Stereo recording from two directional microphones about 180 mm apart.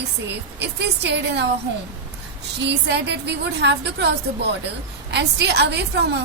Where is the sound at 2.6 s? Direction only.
70° right (ahead or behind).